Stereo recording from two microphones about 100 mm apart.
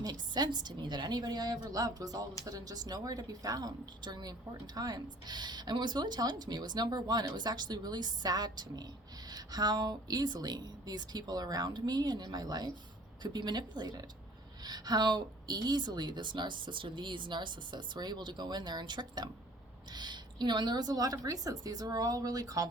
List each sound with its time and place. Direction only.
0.0 s a woman's voice: 45° right (ahead or behind)